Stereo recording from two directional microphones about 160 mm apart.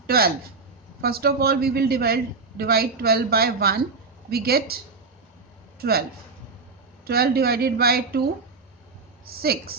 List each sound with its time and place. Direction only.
1.0 s a man's voice: 75° right (ahead or behind)
5.8 s a man's voice: 75° right (ahead or behind)
9.4 s a man's voice: 70° right (ahead or behind)